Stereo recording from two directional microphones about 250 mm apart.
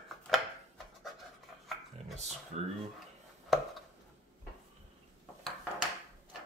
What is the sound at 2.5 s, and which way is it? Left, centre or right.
Speech, right.